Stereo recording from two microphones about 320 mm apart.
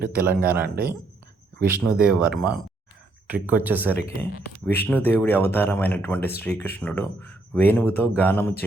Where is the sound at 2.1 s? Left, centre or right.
Centre.